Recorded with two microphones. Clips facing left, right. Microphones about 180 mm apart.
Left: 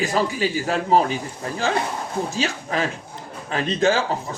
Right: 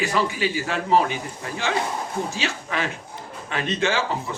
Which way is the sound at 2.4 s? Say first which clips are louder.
Left 3 dB; 40° left (ahead or behind).